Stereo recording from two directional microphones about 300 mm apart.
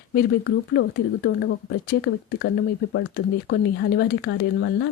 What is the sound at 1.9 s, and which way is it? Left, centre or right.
Speech, left.